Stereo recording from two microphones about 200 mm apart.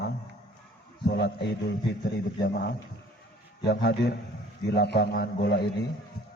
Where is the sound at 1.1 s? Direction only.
60° left (ahead or behind).